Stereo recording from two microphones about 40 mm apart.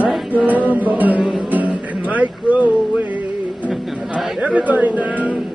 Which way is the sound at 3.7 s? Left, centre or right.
Centre.